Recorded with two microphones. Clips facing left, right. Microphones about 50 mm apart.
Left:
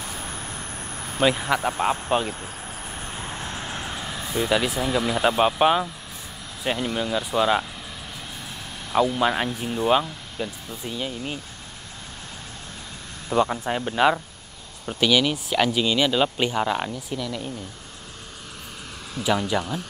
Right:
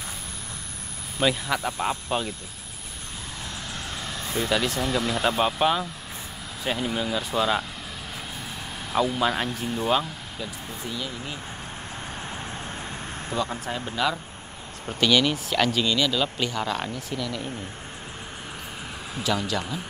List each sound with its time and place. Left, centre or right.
1.2 s speech: left
3.4 s speech: left; by 7.6 s centre
8.9 s speech: centre
9.2 s speech: centre
13.5 s speech: left
14.9 s speech: centre
19.2 s speech: centre